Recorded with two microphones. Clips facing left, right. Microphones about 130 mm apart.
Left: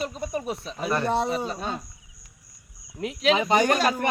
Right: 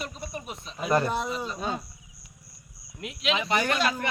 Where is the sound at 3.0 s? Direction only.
35° left (ahead or behind).